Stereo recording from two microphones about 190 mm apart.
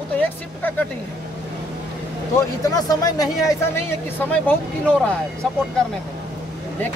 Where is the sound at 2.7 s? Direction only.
20° left (ahead or behind).